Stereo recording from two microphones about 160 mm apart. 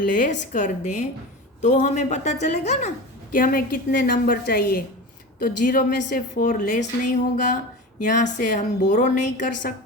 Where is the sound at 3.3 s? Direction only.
65° left (ahead or behind).